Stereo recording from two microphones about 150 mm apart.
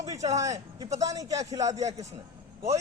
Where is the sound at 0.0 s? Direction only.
25° right (ahead or behind).